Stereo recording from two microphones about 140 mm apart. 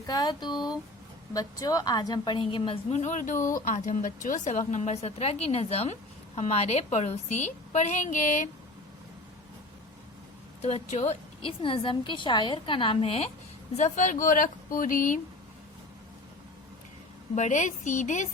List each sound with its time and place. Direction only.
0.1 s a woman's voice: 30° left (ahead or behind)
3.0 s a woman's voice: 60° left (ahead or behind)
10.6 s a woman's voice: 50° left (ahead or behind)
11.6 s a woman's voice: 40° left (ahead or behind)
13.7 s a woman's voice: 60° left (ahead or behind); by 15.2 s 75° left (ahead or behind)
17.3 s a woman's voice: 60° left (ahead or behind)